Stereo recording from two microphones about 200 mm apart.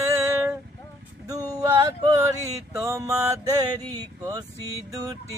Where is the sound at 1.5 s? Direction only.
20° right (ahead or behind).